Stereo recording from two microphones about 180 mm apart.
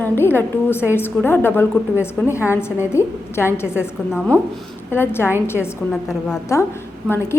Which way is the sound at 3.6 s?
5° right (ahead or behind).